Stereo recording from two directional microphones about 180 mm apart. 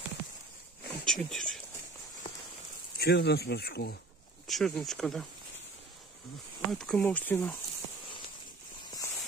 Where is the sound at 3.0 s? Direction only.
65° left (ahead or behind).